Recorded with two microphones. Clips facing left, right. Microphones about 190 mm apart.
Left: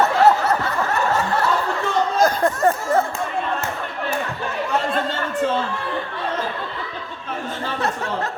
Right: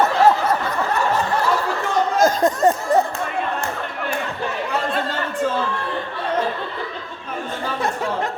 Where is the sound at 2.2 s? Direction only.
20° right (ahead or behind).